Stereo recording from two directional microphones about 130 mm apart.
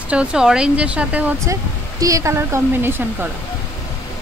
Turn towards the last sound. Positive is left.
turn(degrees=-15)  # may be behind; listen again after turning